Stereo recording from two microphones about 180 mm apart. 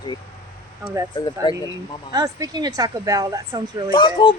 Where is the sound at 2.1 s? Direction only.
20° right (ahead or behind).